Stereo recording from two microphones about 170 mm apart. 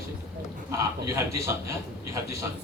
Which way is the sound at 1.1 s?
15° right (ahead or behind).